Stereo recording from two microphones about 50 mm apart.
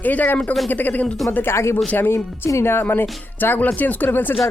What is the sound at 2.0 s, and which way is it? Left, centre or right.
Music, left.